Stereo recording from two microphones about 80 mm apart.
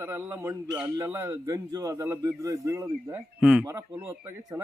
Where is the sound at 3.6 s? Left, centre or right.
Right.